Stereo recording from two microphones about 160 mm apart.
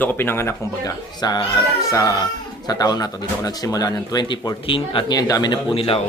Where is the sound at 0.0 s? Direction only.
15° left (ahead or behind).